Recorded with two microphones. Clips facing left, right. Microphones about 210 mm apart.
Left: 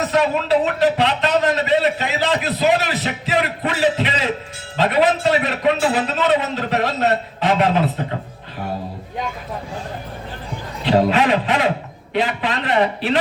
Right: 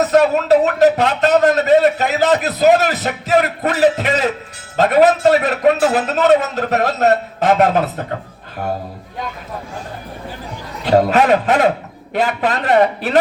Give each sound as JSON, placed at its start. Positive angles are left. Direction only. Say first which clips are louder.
{"t": 0.1, "sound": "a man's voice", "louder": "right 4 dB", "side_deg": -45}
{"t": 4.8, "sound": "a sound", "louder": "right 5 dB", "side_deg": -45}
{"t": 5.8, "sound": "a man's voice", "louder": "right 4 dB", "side_deg": -45}
{"t": 10.8, "sound": "a man's voice", "louder": "right 3 dB", "side_deg": -45}